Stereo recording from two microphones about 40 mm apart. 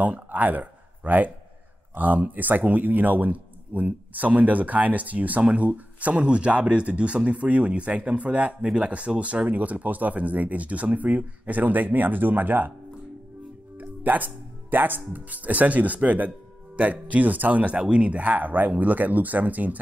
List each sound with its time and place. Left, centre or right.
0.0 s a sound: right
2.0 s speech: right
13.7 s speech: right